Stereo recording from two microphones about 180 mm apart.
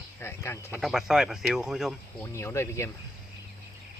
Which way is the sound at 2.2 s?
15° left (ahead or behind).